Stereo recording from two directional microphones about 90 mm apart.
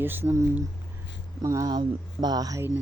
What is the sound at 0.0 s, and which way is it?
Speech, 25° right (ahead or behind).